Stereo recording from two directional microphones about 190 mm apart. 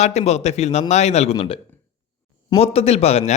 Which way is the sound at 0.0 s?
35° left (ahead or behind).